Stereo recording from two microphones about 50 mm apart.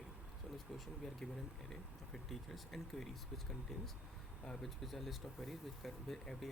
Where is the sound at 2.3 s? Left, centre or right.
Centre.